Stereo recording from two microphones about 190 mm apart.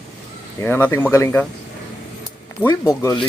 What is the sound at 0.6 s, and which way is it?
Speech, 10° left (ahead or behind).